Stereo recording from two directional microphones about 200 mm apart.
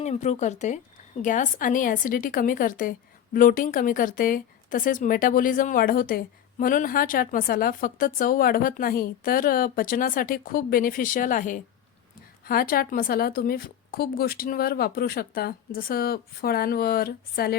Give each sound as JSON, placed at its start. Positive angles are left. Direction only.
{"t": 0.0, "sound": "a woman's voice", "side_deg": 35}